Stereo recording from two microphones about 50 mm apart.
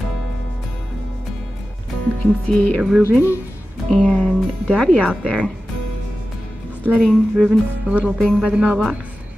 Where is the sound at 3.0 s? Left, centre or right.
Right.